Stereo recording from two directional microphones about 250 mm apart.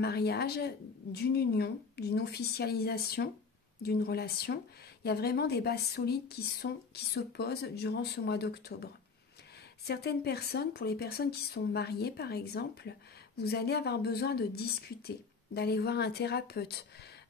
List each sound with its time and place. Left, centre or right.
0.0 s a woman's voice: left
9.8 s a woman's voice: left